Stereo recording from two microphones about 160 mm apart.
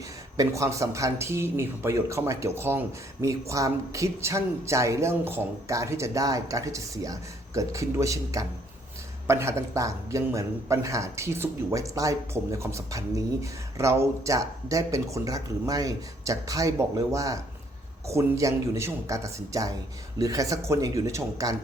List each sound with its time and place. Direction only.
0.3 s a man's voice: 20° right (ahead or behind)